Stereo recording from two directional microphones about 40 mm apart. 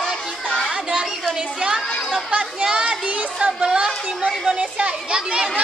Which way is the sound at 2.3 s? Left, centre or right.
Right.